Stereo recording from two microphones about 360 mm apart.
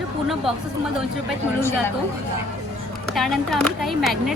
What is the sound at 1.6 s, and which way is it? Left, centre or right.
Speech, centre.